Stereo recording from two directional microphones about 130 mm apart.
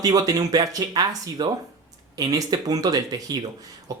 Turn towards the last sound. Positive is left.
turn(degrees=-25)  # may be behind; listen again after turning